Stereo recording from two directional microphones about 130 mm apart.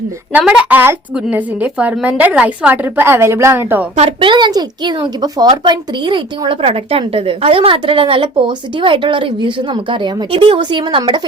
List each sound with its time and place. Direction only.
0.3 s a woman's voice: 10° right (ahead or behind)
3.9 s a woman's voice: 45° right (ahead or behind)